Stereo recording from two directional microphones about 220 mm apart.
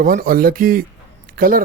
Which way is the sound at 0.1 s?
45° right (ahead or behind).